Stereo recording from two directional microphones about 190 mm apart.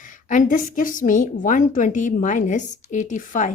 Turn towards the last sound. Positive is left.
turn(degrees=45)  # may be behind; listen again after turning